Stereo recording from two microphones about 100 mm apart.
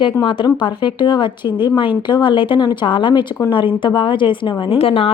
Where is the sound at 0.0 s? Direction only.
55° left (ahead or behind).